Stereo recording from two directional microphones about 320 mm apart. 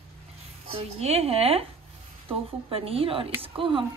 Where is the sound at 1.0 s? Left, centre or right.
Centre.